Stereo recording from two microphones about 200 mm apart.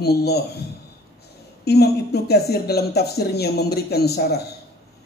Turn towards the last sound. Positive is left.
turn(degrees=55)  # may be behind; listen again after turning